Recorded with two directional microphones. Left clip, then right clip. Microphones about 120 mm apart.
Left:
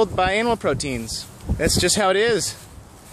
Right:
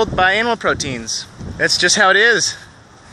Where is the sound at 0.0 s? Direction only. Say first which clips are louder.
Right 5 dB; 20° left (ahead or behind).